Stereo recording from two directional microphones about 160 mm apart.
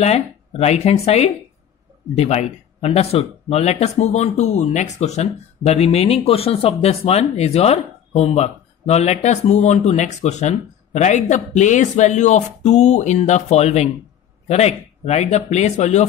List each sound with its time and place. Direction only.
0.0 s speech: 40° left (ahead or behind)